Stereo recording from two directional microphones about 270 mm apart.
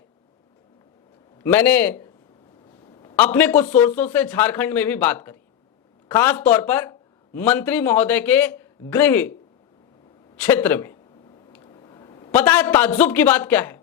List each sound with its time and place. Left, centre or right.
1.4 s a man's voice: centre
10.4 s a man's voice: centre
11.6 s a sound: centre
12.4 s a man's voice: centre